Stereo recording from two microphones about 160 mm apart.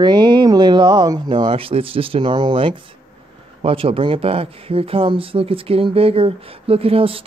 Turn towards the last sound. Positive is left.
turn(degrees=-35)  # may be behind; listen again after turning